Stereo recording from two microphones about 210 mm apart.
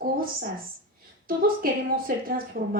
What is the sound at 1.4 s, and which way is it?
A woman's voice, 45° right (ahead or behind).